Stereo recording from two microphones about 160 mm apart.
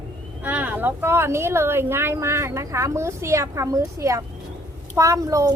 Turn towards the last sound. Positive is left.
turn(degrees=-20)  # may be behind; listen again after turning